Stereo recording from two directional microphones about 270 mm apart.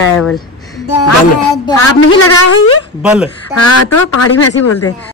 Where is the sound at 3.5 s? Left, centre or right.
Left.